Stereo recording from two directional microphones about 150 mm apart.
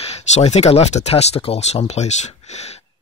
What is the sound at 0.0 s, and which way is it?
Speech, 45° left (ahead or behind).